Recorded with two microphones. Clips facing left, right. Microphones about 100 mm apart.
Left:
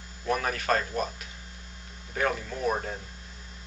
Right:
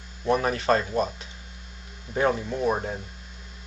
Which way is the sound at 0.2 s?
25° right (ahead or behind).